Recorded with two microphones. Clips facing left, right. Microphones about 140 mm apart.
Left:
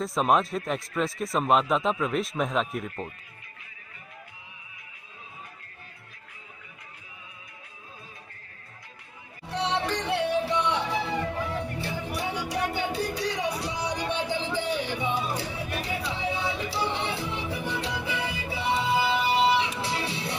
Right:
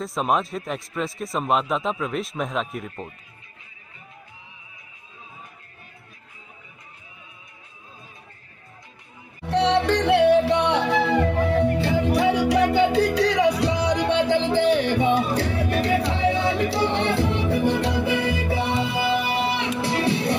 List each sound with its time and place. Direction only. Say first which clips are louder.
0.0 s speech: even; centre (ahead or behind)
9.5 s music: right 9 dB; 70° right (ahead or behind)